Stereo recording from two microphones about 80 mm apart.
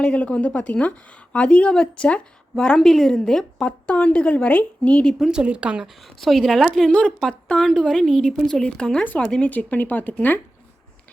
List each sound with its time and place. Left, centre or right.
0.0 s speech: centre
5.2 s speech: centre
6.1 s speech: centre; by 10.4 s left